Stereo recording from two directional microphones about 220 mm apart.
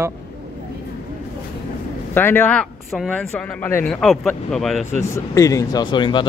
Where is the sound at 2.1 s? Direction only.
10° left (ahead or behind).